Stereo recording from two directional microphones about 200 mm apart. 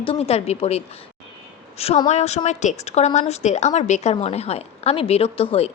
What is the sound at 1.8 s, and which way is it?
A woman's voice, 30° left (ahead or behind).